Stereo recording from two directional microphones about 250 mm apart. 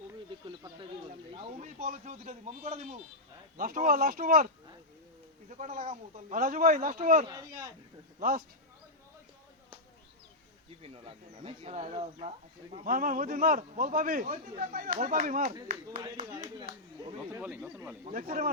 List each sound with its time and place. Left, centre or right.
1.3 s a man's voice: right
7.3 s speech: centre
10.8 s a man's voice: right
17.3 s speech: centre
18.0 s a man's voice: right